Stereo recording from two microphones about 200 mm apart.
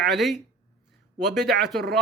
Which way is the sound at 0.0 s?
Centre (ahead or behind).